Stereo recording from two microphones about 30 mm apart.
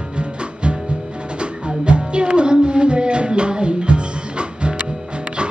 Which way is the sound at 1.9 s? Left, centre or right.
Right.